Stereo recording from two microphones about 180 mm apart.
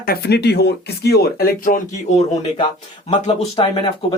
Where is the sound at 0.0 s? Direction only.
60° left (ahead or behind).